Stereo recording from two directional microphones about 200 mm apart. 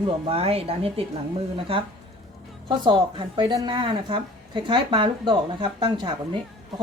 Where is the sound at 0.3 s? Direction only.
30° right (ahead or behind).